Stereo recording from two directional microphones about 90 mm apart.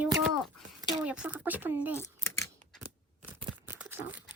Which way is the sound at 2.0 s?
35° left (ahead or behind).